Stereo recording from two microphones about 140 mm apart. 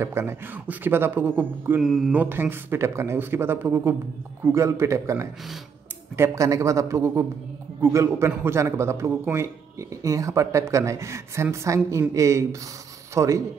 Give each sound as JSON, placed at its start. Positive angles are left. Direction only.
{"t": 0.0, "sound": "speech", "side_deg": -20}
{"t": 1.8, "sound": "mantra", "side_deg": 0}
{"t": 2.1, "sound": "a man's voice", "side_deg": -15}